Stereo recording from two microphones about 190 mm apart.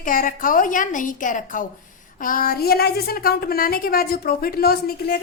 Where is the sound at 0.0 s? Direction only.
45° left (ahead or behind).